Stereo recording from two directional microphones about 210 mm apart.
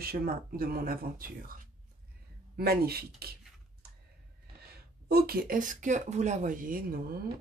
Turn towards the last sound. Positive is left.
turn(degrees=-45)  # may be behind; listen again after turning